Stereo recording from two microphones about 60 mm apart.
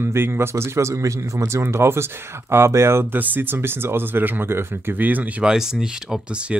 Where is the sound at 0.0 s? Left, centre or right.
Right.